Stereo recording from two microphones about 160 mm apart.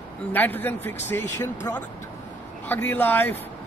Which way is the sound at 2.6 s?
10° left (ahead or behind).